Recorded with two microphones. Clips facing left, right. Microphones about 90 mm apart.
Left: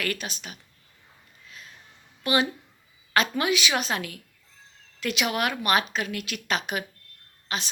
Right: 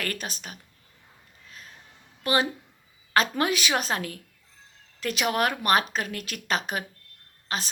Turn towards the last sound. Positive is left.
turn(degrees=-40)  # may be behind; listen again after turning